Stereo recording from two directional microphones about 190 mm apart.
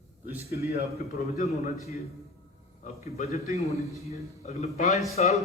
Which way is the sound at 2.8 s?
35° left (ahead or behind).